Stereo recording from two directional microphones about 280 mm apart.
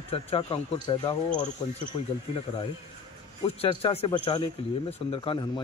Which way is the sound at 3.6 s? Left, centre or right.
Centre.